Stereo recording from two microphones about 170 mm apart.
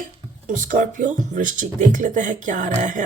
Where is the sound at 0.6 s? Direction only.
50° right (ahead or behind).